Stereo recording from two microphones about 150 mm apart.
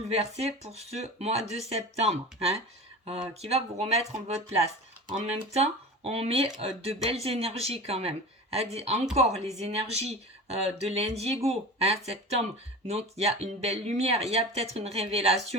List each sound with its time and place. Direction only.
0.1 s speech: 45° right (ahead or behind)